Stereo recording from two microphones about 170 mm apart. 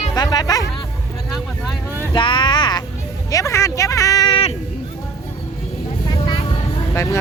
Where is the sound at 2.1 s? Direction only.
30° left (ahead or behind).